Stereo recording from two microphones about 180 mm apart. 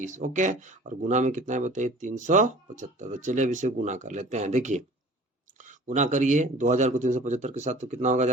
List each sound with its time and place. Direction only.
0.0 s speech: 45° right (ahead or behind)